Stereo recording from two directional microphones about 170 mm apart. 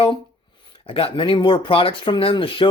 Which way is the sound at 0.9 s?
35° left (ahead or behind).